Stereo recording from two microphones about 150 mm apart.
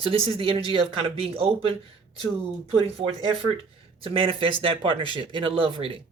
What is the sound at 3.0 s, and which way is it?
Speech, 40° right (ahead or behind).